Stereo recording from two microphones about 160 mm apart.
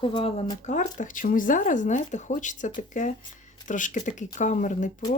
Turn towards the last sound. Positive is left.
turn(degrees=50)  # may be behind; listen again after turning